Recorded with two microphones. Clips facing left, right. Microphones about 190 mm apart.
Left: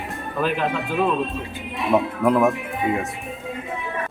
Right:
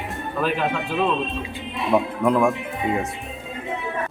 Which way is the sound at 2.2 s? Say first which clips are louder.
Left 1 dB; 5° left (ahead or behind).